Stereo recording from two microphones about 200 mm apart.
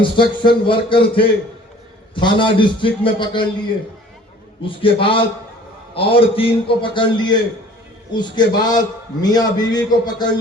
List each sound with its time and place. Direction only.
0.0 s a man's voice: 25° left (ahead or behind)
4.6 s a man's voice: 25° left (ahead or behind)